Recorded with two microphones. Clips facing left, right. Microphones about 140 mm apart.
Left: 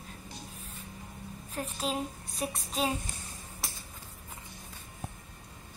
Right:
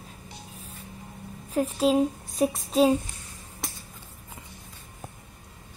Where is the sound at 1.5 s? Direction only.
35° right (ahead or behind).